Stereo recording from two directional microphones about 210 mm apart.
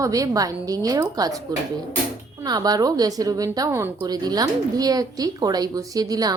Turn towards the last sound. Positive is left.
turn(degrees=-20)  # may be behind; listen again after turning